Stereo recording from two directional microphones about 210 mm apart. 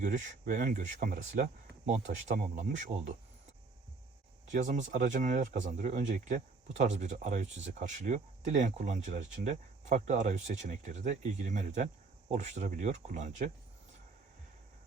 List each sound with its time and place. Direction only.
0.0 s speech: 35° right (ahead or behind)
4.4 s speech: 35° right (ahead or behind)